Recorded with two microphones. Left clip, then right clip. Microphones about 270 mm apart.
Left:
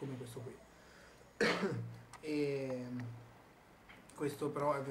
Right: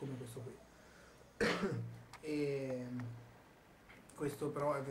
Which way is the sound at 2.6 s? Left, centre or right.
Left.